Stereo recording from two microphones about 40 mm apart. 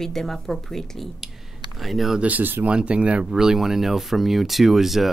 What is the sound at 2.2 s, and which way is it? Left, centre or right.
Speech, right.